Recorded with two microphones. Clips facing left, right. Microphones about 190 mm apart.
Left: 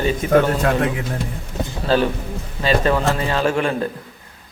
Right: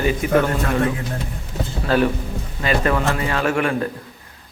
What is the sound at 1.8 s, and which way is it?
Speech, 30° left (ahead or behind).